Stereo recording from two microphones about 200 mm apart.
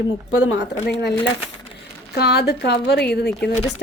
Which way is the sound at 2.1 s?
55° left (ahead or behind).